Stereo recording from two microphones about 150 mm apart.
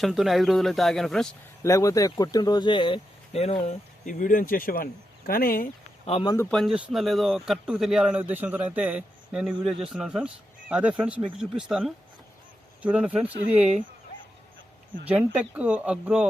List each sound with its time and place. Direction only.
0.0 s speech: centre (ahead or behind)
1.6 s speech: 20° left (ahead or behind); by 5.6 s 80° left
6.2 s speech: 20° left (ahead or behind)
6.5 s a man's voice: centre (ahead or behind)
15.0 s a man's voice: 10° right (ahead or behind)